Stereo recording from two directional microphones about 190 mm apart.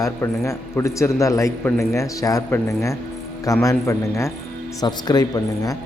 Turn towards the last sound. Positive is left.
turn(degrees=20)  # may be behind; listen again after turning